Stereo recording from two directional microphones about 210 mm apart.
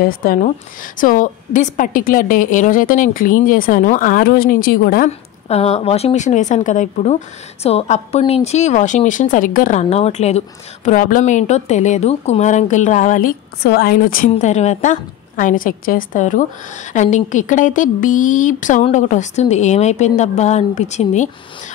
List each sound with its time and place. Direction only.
0.2 s speech: 45° left (ahead or behind)
5.5 s speech: 30° left (ahead or behind)